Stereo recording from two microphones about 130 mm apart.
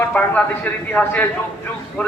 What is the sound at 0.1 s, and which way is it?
A man's voice, 10° left (ahead or behind).